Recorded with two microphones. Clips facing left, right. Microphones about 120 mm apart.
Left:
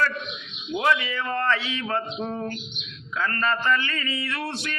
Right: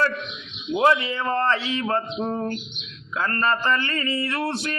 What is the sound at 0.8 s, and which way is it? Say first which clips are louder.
Male singing: right 4 dB; 35° right (ahead or behind).